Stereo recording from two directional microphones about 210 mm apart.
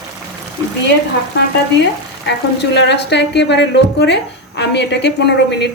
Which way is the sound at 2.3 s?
55° left (ahead or behind).